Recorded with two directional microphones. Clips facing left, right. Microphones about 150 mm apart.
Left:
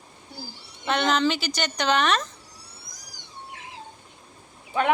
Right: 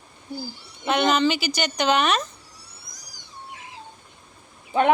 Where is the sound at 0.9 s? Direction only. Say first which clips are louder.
Right 2 dB; 10° right (ahead or behind).